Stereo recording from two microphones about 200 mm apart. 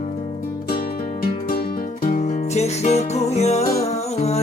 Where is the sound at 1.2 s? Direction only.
45° left (ahead or behind).